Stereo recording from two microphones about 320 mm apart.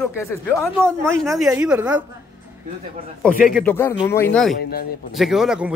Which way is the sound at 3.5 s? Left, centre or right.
Centre.